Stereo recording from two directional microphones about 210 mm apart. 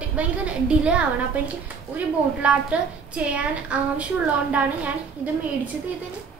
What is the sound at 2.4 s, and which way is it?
A child's voice, 5° right (ahead or behind).